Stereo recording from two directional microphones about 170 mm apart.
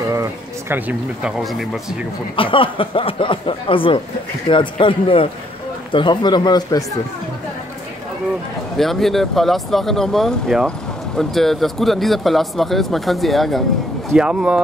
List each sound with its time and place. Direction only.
0.1 s speech: 15° right (ahead or behind)
2.3 s speech: 30° left (ahead or behind)
8.7 s speech: centre (ahead or behind)